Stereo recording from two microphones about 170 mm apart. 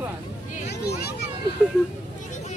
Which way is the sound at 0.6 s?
70° left (ahead or behind).